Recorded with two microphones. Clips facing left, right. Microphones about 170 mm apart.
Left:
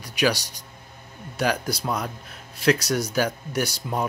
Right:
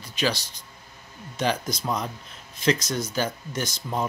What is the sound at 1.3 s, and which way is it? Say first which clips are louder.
A man's voice: left 1 dB; 10° left (ahead or behind).